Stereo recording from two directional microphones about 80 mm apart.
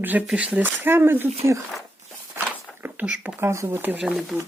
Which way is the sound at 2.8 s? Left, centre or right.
Right.